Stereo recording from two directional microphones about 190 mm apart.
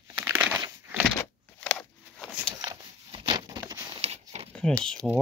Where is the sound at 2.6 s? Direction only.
25° right (ahead or behind).